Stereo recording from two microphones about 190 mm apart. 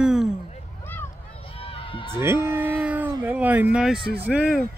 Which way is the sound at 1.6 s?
30° left (ahead or behind).